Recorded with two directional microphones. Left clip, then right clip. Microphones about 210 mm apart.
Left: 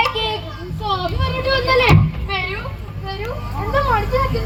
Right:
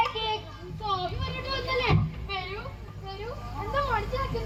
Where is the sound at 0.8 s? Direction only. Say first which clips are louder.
Left 9 dB; 50° left (ahead or behind).